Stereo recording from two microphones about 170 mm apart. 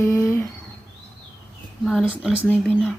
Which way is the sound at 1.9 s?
Centre (ahead or behind).